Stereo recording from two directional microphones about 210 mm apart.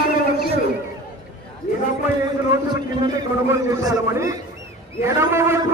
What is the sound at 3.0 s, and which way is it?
A man's voice, 15° right (ahead or behind).